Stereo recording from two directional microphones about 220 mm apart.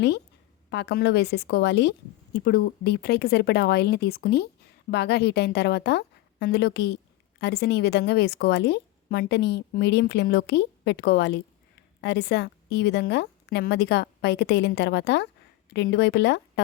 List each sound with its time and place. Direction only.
0.7 s a woman's voice: 50° left (ahead or behind)